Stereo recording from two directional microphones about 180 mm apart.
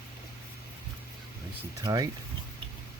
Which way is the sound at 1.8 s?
25° right (ahead or behind).